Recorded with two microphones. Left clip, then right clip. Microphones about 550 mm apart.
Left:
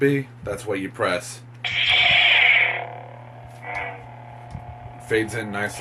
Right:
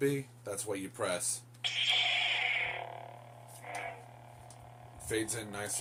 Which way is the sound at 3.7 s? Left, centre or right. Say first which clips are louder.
Left 12 dB; right.